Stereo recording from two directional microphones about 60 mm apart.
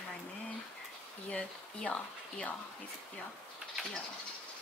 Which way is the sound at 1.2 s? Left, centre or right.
Centre.